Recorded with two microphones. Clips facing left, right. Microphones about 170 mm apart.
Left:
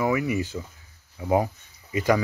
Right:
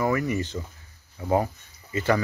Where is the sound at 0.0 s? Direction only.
5° left (ahead or behind).